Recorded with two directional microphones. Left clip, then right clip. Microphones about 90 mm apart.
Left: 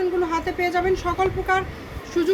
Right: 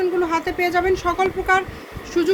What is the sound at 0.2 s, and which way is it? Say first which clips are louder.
Speech: right 3 dB; 40° right (ahead or behind).